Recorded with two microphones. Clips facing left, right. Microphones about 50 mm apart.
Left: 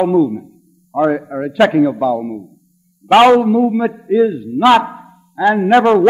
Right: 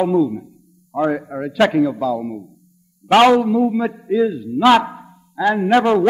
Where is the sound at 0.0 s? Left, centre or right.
Centre.